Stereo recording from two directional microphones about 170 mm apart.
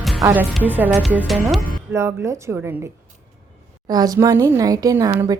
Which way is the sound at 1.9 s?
15° right (ahead or behind).